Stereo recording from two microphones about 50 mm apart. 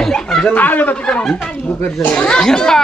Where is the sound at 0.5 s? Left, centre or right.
Left.